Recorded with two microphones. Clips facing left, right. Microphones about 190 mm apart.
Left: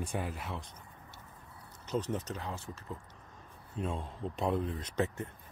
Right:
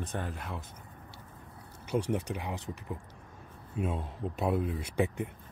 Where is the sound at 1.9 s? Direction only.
10° right (ahead or behind).